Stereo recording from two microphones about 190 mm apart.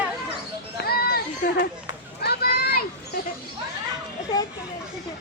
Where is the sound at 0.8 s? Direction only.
55° left (ahead or behind).